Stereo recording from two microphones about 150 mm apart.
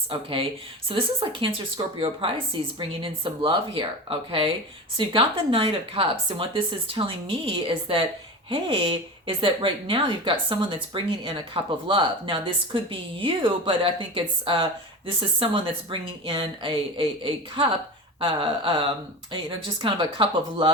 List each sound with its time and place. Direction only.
0.1 s a woman's voice: 35° right (ahead or behind)